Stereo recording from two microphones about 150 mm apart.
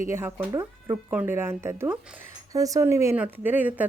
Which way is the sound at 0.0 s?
15° right (ahead or behind).